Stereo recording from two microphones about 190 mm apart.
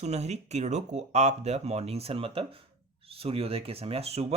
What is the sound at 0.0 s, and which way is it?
Speech, 35° right (ahead or behind).